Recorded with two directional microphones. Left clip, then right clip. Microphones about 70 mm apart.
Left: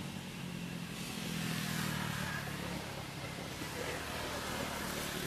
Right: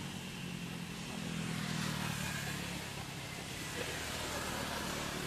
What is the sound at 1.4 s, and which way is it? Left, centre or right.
Vehicle, left.